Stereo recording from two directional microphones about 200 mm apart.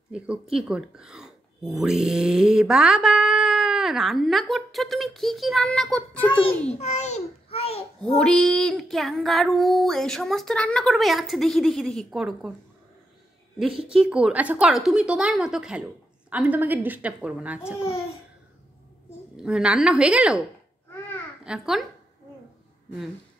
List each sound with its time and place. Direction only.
0.1 s speech: 5° right (ahead or behind)
6.2 s a child's voice: 25° left (ahead or behind)
6.8 s a sound: 35° left (ahead or behind)
8.2 s speech: 5° left (ahead or behind)
13.8 s a woman's voice: 5° right (ahead or behind)
19.3 s speech: 5° right (ahead or behind)
21.5 s speech: centre (ahead or behind)